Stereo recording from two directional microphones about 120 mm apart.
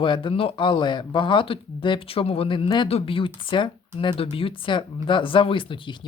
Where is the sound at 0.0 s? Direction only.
45° left (ahead or behind).